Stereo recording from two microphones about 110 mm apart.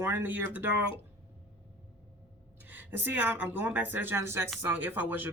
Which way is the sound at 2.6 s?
15° right (ahead or behind).